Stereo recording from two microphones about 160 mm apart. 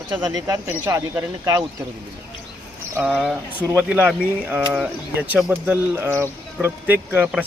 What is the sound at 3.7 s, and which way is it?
Speech, 10° right (ahead or behind).